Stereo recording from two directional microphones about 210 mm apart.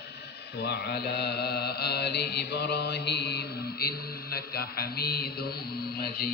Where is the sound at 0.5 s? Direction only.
55° left (ahead or behind).